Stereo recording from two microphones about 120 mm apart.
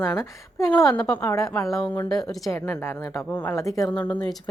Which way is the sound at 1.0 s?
10° left (ahead or behind).